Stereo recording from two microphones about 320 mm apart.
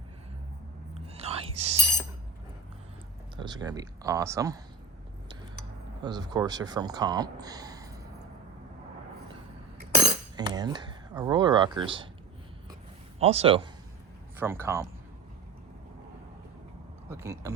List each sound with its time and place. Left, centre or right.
0.9 s whispering: centre
3.3 s speech: centre
6.0 s speech: centre
10.1 s speech: centre
13.1 s a man's voice: centre
14.3 s speech: centre
17.1 s speech: centre